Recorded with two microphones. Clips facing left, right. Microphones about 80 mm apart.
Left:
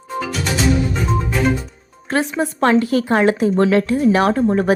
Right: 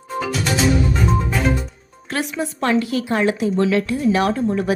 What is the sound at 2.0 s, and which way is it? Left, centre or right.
A woman's voice, left.